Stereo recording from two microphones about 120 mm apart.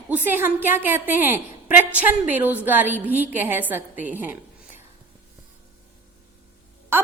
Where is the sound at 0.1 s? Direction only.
15° right (ahead or behind).